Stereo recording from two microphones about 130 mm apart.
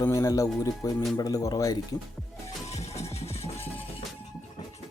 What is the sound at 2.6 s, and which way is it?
Music, 55° left (ahead or behind).